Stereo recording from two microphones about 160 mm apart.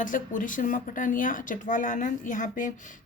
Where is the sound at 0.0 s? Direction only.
55° left (ahead or behind).